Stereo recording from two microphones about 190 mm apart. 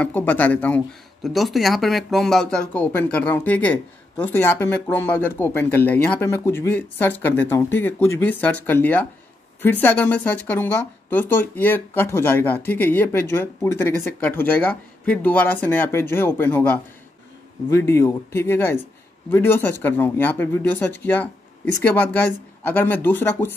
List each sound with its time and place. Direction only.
0.0 s speech: 10° left (ahead or behind)